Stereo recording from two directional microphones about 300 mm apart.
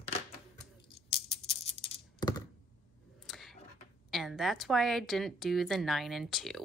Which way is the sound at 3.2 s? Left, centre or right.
Centre.